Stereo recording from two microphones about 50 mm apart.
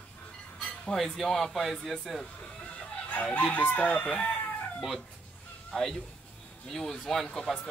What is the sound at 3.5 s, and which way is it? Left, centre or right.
Chicken, left.